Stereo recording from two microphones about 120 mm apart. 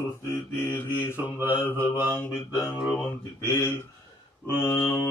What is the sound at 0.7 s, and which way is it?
Mantra, 20° left (ahead or behind).